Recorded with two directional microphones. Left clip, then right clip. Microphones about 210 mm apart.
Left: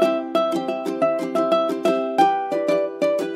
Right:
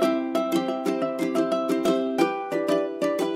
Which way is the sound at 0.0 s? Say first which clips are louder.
Left 5 dB; 15° left (ahead or behind).